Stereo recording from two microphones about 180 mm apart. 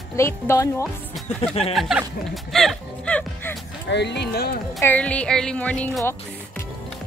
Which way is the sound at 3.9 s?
70° left (ahead or behind).